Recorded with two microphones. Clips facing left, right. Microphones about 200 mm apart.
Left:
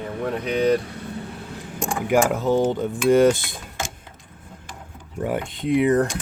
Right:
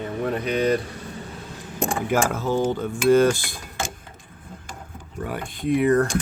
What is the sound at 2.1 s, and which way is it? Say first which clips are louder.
Cutlery: left 5 dB; 15° left (ahead or behind).